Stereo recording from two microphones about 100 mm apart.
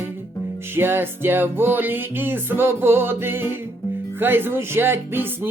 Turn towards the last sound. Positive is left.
turn(degrees=-20)  # may be behind; listen again after turning